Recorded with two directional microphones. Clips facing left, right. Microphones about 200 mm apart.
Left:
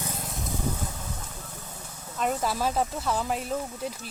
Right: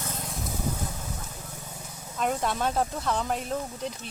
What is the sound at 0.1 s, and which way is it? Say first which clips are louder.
Vehicle: even; centre (ahead or behind).